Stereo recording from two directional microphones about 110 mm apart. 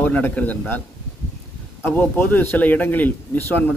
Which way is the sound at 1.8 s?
20° left (ahead or behind).